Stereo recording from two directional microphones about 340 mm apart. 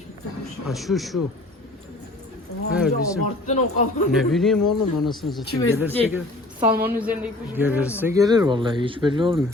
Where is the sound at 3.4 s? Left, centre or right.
Left.